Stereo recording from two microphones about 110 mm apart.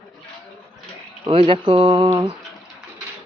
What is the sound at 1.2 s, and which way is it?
Speech, 55° right (ahead or behind).